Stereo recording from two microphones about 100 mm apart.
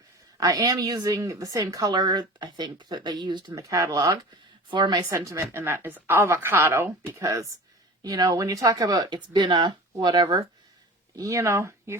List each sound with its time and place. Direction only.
0.3 s a woman's voice: 35° right (ahead or behind)
3.5 s a woman's voice: 35° right (ahead or behind)
4.7 s speech: 45° right (ahead or behind)
5.1 s a woman's voice: 30° right (ahead or behind); by 10.4 s 45° right (ahead or behind)
11.2 s a woman's voice: 30° right (ahead or behind)